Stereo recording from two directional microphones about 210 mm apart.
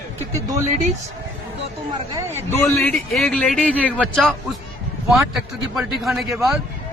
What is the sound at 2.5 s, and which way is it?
A man's voice, 10° left (ahead or behind).